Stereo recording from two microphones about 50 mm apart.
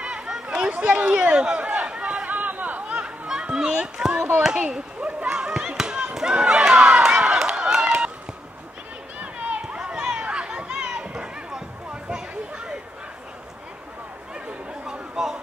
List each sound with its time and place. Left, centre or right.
0.0 s chatter: centre
0.6 s a sound: right
1.3 s run: right
2.3 s chatter: right
3.3 s children playing: centre
4.5 s a sound: right
6.1 s run: centre
9.2 s run: right
9.8 s a sound: centre
14.3 s chatter: centre